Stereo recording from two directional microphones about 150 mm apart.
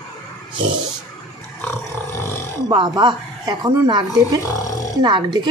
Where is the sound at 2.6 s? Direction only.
25° right (ahead or behind).